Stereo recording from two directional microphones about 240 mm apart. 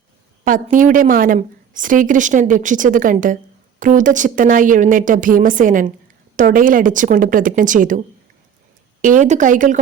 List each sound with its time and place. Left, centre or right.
0.4 s a woman's voice: right